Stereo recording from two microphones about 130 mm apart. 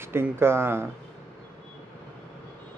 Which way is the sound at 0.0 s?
20° right (ahead or behind).